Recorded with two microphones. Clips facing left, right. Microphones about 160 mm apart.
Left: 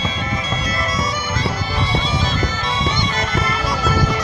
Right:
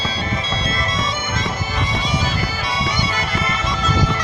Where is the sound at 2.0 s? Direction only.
15° right (ahead or behind).